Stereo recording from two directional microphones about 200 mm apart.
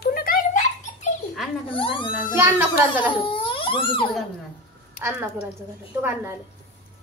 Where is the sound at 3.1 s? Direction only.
25° left (ahead or behind).